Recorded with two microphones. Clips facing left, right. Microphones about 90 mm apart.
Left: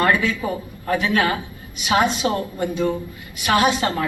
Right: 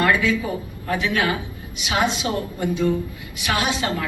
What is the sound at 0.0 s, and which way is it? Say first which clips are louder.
A man's voice: even; 40° left (ahead or behind).